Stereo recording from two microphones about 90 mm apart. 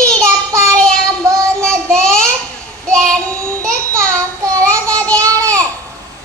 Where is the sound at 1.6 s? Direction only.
10° left (ahead or behind).